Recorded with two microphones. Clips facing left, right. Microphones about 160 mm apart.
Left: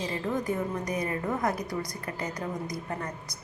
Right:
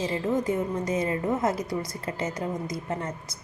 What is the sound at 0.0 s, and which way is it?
A woman's voice, 20° right (ahead or behind).